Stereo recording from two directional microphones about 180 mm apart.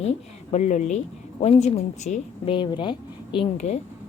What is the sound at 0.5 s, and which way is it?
A woman's voice, 40° left (ahead or behind).